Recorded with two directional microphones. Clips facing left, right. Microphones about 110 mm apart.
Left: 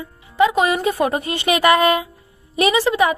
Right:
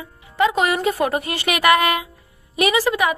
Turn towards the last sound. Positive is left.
turn(degrees=25)  # may be behind; listen again after turning